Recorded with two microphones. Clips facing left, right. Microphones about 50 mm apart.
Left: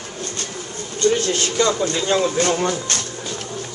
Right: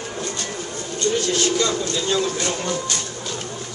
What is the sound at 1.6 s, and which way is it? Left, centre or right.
Speech, left.